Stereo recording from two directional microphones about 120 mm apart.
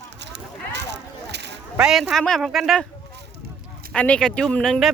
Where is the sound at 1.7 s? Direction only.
5° right (ahead or behind).